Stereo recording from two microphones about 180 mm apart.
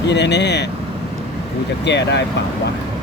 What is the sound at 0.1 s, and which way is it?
Speech, 70° left (ahead or behind).